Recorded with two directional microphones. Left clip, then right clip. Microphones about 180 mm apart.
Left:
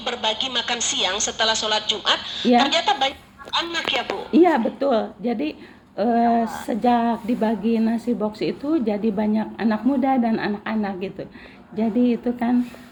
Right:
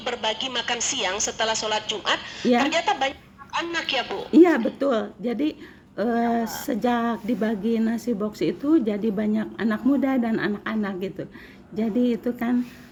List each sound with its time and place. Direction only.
0.0 s a woman's voice: 10° left (ahead or behind)
3.8 s speech: 30° right (ahead or behind)
4.9 s a woman's voice: 15° right (ahead or behind)